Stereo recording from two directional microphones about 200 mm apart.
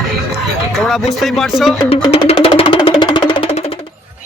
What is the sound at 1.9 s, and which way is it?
Music, 30° left (ahead or behind).